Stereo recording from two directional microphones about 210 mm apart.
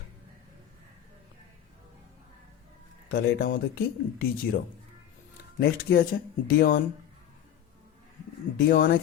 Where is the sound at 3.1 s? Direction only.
45° left (ahead or behind).